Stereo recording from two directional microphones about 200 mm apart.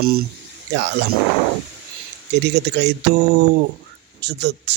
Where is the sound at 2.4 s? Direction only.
60° right (ahead or behind).